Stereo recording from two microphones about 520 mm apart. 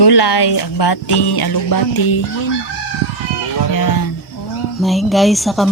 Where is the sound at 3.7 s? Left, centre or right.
Left.